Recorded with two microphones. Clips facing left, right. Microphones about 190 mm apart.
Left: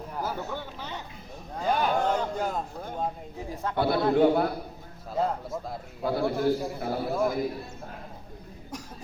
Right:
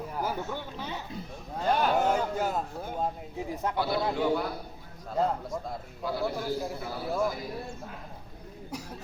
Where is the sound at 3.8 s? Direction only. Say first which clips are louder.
Left 8 dB; 55° left (ahead or behind).